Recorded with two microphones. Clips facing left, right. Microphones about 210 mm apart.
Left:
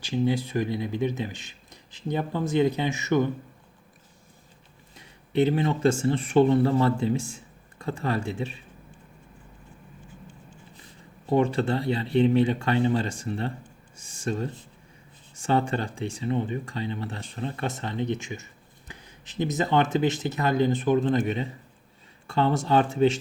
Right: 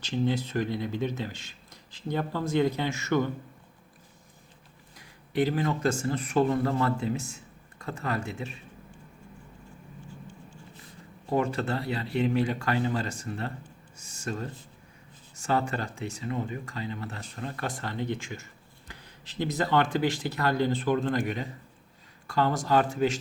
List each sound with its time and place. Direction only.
0.0 s speech: 15° left (ahead or behind)
4.9 s speech: 25° left (ahead or behind)
11.3 s speech: 30° left (ahead or behind)
15.4 s speech: 30° left (ahead or behind)